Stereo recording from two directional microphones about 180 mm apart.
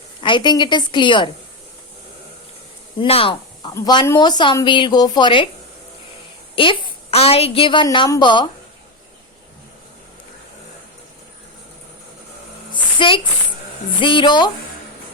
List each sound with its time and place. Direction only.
0.2 s a woman's voice: 25° left (ahead or behind)
3.0 s speech: 30° left (ahead or behind)
3.8 s a woman's voice: 20° left (ahead or behind)
6.6 s a woman's voice: 30° left (ahead or behind)
12.7 s a sound: 25° left (ahead or behind)
14.0 s a woman's voice: 30° left (ahead or behind)